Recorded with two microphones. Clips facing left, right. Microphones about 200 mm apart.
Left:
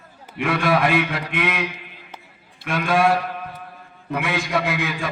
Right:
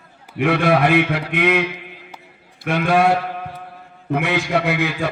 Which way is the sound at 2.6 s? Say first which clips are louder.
Right 3 dB; 65° right (ahead or behind).